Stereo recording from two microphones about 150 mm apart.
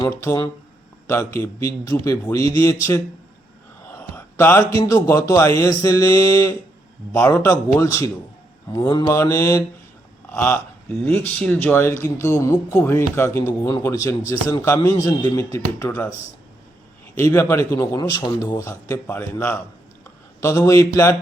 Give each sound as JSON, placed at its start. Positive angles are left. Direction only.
{"t": 0.0, "sound": "a man's voice", "side_deg": 20}
{"t": 3.9, "sound": "a man's voice", "side_deg": 15}
{"t": 17.2, "sound": "a man's voice", "side_deg": 15}